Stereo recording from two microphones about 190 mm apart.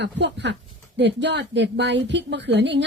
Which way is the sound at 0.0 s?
65° right (ahead or behind).